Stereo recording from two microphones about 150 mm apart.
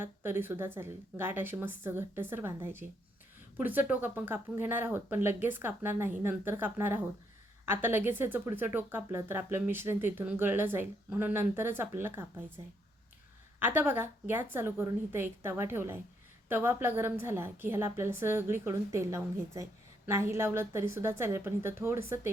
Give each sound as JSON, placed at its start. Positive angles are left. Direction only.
{"t": 0.0, "sound": "speech", "side_deg": -15}
{"t": 13.6, "sound": "speech", "side_deg": -15}